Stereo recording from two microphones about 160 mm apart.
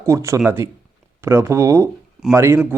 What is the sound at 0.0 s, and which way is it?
Speech, 20° right (ahead or behind).